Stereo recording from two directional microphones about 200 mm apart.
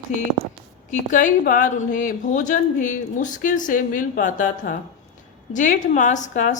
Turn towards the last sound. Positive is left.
turn(degrees=35)  # may be behind; listen again after turning